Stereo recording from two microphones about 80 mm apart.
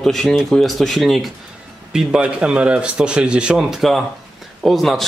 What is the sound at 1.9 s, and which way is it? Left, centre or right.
A man's voice, centre.